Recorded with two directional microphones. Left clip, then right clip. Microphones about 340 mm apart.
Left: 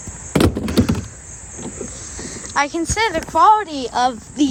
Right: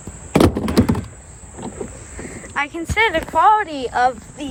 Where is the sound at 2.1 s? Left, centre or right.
Centre.